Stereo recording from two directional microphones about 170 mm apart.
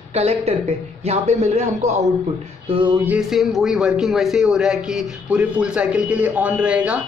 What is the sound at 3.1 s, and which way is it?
A man's voice, centre (ahead or behind).